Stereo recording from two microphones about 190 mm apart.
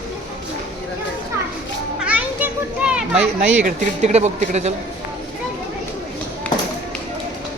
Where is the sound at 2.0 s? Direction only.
5° right (ahead or behind).